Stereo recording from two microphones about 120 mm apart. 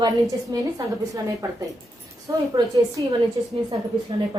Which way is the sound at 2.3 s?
30° right (ahead or behind).